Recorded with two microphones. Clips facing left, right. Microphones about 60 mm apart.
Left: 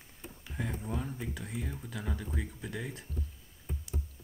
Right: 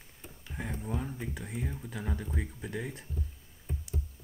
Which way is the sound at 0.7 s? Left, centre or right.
Centre.